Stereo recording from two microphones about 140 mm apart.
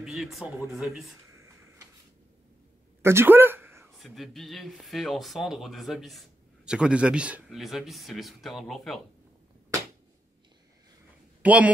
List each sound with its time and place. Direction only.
0.0 s speech: centre (ahead or behind)
3.0 s a sound: 15° right (ahead or behind)
4.0 s speech: centre (ahead or behind)
11.4 s speech: 10° right (ahead or behind)